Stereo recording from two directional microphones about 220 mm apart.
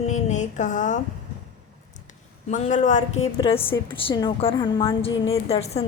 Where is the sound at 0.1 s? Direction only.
35° left (ahead or behind).